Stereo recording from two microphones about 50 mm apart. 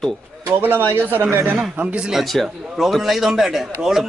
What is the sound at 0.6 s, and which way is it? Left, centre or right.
Speech, right.